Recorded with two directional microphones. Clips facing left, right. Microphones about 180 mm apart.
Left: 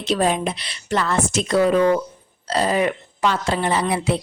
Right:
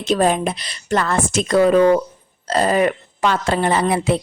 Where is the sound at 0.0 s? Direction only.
45° right (ahead or behind).